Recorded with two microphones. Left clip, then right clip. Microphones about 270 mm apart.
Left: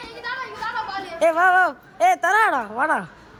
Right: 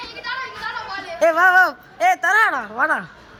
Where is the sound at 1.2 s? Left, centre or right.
Centre.